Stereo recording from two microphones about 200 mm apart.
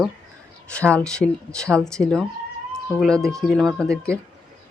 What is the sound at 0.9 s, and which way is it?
Speech, 5° left (ahead or behind).